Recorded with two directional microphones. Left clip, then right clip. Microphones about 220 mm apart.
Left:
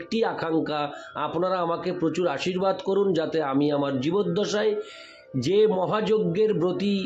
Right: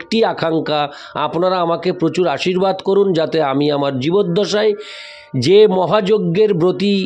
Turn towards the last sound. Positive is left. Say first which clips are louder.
# right 10 dB
turn(degrees=-45)  # may be behind; listen again after turning